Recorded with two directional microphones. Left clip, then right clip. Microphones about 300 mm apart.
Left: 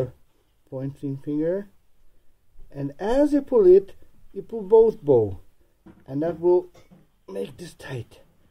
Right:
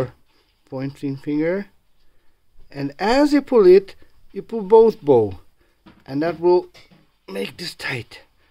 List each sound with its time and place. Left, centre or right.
0.7 s speech: right
2.7 s speech: right